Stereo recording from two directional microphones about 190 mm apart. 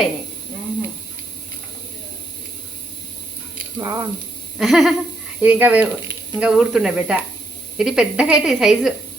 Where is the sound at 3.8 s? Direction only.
20° right (ahead or behind).